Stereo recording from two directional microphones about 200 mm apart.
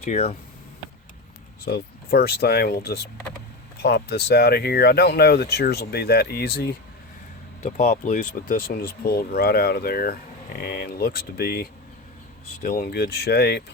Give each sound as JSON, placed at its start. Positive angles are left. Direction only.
{"t": 0.0, "sound": "speech", "side_deg": 30}
{"t": 1.6, "sound": "speech", "side_deg": 50}
{"t": 7.6, "sound": "speech", "side_deg": 30}